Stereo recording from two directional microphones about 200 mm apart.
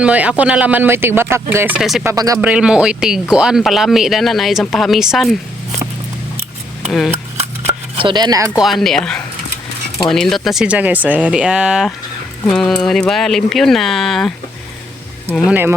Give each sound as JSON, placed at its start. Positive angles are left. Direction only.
{"t": 0.0, "sound": "speech", "side_deg": -5}
{"t": 2.0, "sound": "speech", "side_deg": -15}
{"t": 7.9, "sound": "speech", "side_deg": -25}
{"t": 8.5, "sound": "speech", "side_deg": 0}
{"t": 15.4, "sound": "speech", "side_deg": -10}